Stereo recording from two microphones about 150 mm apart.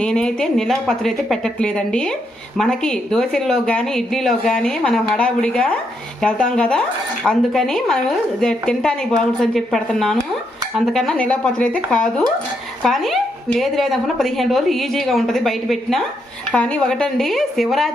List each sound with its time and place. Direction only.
0.0 s a woman's voice: 5° left (ahead or behind)